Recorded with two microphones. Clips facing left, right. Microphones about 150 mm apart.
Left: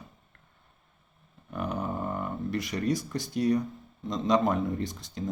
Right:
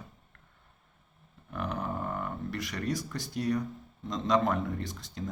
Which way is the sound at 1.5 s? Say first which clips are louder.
Left 2 dB; 15° left (ahead or behind).